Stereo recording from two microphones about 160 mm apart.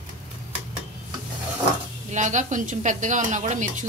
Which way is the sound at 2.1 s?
50° right (ahead or behind).